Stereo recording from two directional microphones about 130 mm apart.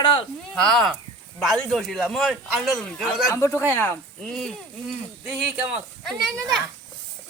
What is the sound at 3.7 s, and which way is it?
Speech, 15° left (ahead or behind).